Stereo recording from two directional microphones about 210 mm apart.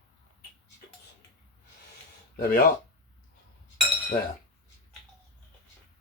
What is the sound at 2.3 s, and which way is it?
Speech, 45° left (ahead or behind).